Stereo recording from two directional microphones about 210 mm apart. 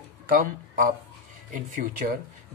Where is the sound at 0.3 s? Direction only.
40° right (ahead or behind).